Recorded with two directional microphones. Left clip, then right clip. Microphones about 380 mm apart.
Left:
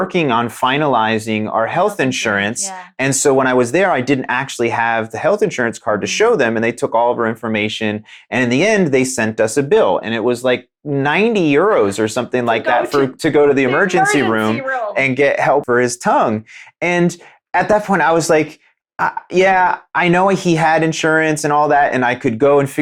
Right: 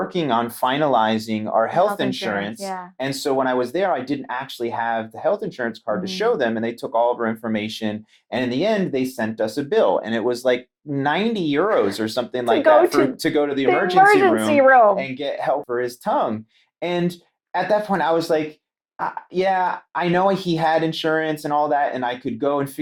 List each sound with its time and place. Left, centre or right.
0.2 s speech: left
2.2 s speech: left
17.5 s speech: left